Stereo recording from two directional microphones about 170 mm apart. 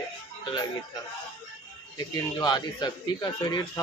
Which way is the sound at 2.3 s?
25° left (ahead or behind).